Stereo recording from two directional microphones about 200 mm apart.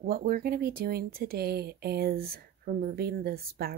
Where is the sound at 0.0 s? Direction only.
50° right (ahead or behind).